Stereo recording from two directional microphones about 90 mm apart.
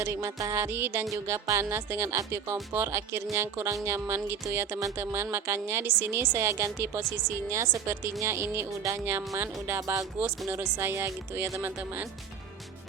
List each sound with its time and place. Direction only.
0.0 s a woman's voice: 30° right (ahead or behind)
10.2 s speech: 15° right (ahead or behind)
10.5 s speech: 25° right (ahead or behind)